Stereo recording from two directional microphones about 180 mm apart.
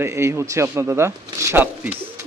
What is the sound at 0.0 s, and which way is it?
Speech, 15° right (ahead or behind).